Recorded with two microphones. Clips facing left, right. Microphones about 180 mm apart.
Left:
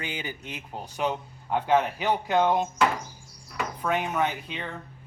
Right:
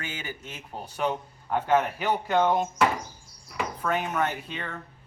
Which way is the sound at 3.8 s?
10° left (ahead or behind).